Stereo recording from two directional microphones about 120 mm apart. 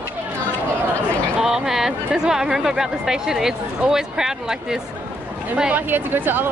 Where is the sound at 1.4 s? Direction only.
5° right (ahead or behind).